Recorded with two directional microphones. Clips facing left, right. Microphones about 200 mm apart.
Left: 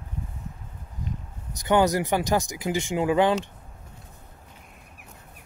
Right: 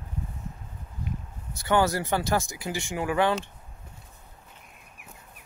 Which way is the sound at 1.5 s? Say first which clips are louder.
Left 3 dB; 15° left (ahead or behind).